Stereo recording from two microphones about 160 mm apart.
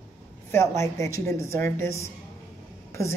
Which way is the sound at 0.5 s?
20° left (ahead or behind).